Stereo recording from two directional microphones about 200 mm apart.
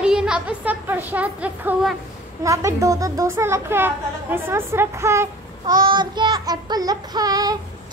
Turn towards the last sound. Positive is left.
turn(degrees=-20)  # may be behind; listen again after turning